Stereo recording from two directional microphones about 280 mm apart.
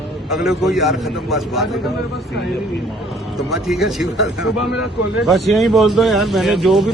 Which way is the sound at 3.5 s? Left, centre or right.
Centre.